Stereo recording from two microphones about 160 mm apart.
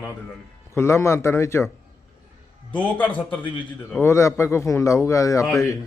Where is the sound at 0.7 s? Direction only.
15° left (ahead or behind).